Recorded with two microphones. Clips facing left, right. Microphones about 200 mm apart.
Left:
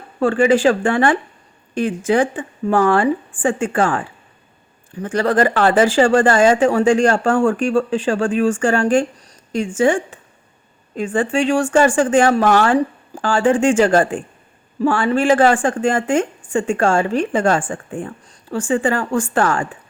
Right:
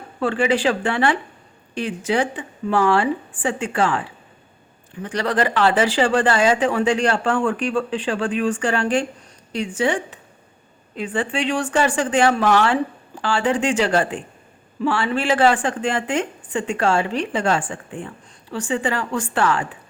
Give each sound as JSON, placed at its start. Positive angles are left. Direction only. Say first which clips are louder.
{"t": 0.2, "sound": "speech", "louder": "left 6 dB", "side_deg": 45}
{"t": 5.0, "sound": "speech", "louder": "left 5 dB", "side_deg": 45}